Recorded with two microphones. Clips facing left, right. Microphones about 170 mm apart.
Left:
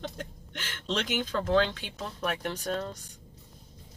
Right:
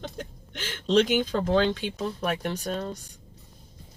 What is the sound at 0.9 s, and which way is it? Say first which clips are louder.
Speech: right 8 dB; 20° right (ahead or behind).